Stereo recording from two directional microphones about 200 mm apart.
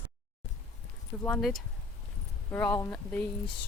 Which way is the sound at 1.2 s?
5° left (ahead or behind).